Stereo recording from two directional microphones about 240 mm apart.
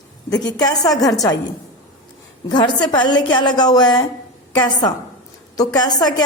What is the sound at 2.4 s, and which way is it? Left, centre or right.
A woman's voice, centre.